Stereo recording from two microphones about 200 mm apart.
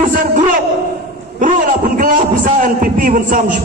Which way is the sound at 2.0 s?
40° right (ahead or behind).